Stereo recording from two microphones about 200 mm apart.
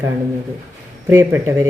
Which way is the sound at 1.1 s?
10° right (ahead or behind).